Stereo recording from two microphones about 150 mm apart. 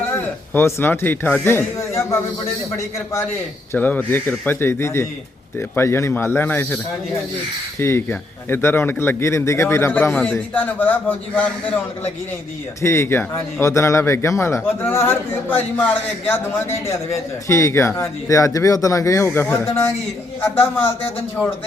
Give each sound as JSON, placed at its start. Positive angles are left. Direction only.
{"t": 0.5, "sound": "speech", "side_deg": 15}
{"t": 3.7, "sound": "speech", "side_deg": 10}
{"t": 7.8, "sound": "speech", "side_deg": 15}